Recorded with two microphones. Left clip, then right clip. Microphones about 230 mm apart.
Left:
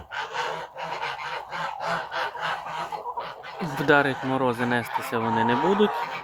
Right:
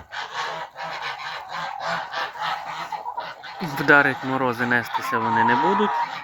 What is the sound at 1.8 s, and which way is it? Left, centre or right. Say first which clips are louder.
Goose: right 1 dB; centre.